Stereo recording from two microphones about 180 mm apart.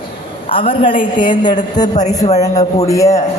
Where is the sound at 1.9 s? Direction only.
40° left (ahead or behind).